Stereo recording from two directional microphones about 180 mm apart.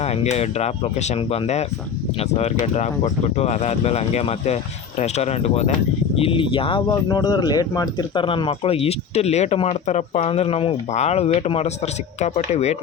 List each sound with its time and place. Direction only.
0.0 s speech: 35° left (ahead or behind)